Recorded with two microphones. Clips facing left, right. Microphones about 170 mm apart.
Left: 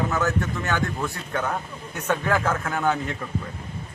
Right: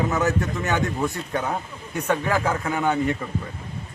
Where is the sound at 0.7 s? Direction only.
20° right (ahead or behind); by 3.2 s centre (ahead or behind).